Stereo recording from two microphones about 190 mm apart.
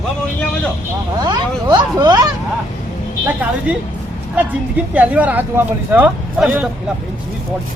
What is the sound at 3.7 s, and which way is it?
Speech, 5° right (ahead or behind).